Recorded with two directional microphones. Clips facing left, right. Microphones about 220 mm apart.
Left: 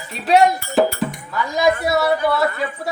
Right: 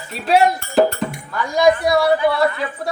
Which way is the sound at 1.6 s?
5° left (ahead or behind).